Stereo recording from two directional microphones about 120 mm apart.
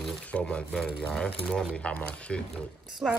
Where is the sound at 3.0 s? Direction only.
5° right (ahead or behind).